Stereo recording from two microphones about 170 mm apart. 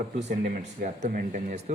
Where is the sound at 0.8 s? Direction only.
55° right (ahead or behind).